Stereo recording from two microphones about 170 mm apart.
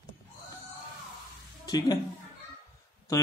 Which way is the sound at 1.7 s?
25° left (ahead or behind).